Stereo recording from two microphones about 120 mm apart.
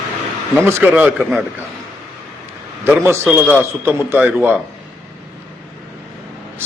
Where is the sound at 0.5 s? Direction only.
15° right (ahead or behind).